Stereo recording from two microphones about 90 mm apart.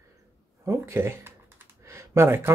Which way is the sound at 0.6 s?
30° right (ahead or behind).